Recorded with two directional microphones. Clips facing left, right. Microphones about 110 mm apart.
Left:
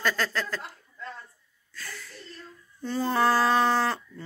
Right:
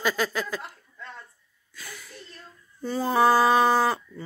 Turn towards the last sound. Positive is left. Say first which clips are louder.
# right 3 dB
turn(degrees=-10)  # may be behind; listen again after turning